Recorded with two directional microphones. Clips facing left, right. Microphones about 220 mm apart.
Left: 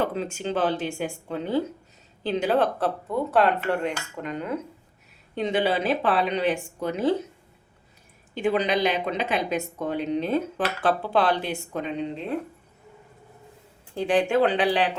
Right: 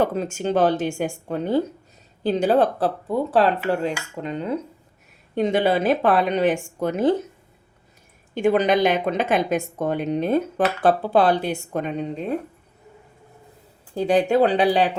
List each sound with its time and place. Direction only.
0.0 s a woman's voice: 45° right (ahead or behind)
5.3 s a woman's voice: 45° right (ahead or behind)
8.4 s a woman's voice: 45° right (ahead or behind)
13.9 s speech: 40° right (ahead or behind)